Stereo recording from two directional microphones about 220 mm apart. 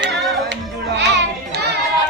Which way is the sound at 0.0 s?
50° right (ahead or behind).